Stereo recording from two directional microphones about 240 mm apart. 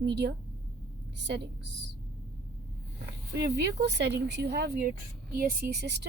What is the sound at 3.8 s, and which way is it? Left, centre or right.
A woman's voice, right.